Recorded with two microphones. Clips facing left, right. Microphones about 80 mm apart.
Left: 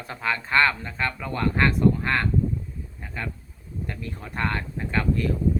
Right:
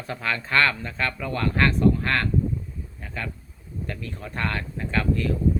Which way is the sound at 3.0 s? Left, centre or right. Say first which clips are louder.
Even; left.